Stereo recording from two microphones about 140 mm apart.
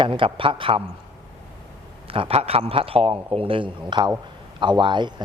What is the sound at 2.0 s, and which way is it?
A man's voice, 40° right (ahead or behind).